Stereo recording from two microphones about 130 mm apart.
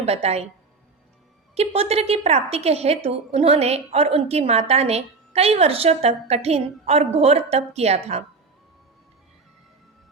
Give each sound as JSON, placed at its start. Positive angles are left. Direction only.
{"t": 0.0, "sound": "a woman's voice", "side_deg": -55}
{"t": 1.5, "sound": "a woman's voice", "side_deg": -50}